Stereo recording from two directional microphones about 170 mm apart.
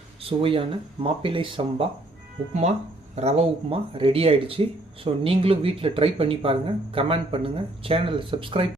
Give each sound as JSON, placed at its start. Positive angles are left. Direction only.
{"t": 0.2, "sound": "speech", "side_deg": -35}